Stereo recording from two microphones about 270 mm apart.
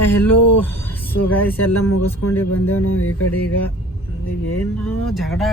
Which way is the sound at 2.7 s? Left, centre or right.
Left.